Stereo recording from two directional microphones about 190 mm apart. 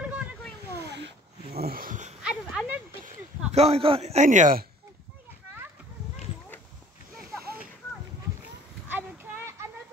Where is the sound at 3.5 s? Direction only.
30° right (ahead or behind).